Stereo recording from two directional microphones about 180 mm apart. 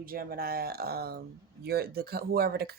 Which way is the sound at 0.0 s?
55° right (ahead or behind).